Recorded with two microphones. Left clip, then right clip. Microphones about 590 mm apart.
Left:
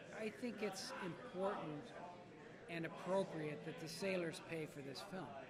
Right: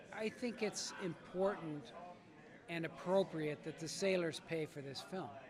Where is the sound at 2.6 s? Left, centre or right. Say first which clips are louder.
Right 4 dB; right.